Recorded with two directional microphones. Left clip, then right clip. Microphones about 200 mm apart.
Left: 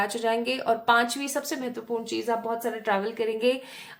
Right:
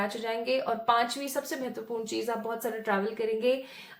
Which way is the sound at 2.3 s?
20° left (ahead or behind).